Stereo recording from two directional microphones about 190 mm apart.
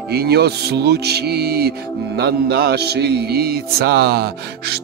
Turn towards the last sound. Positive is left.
turn(degrees=-55)  # may be behind; listen again after turning